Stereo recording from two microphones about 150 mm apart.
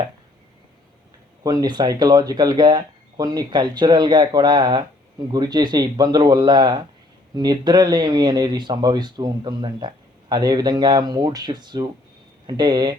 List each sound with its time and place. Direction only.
1.5 s speech: 25° right (ahead or behind)